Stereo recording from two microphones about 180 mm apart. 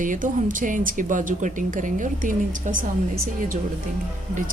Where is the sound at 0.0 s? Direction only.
45° right (ahead or behind).